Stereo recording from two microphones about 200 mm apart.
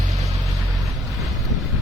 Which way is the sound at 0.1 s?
15° right (ahead or behind).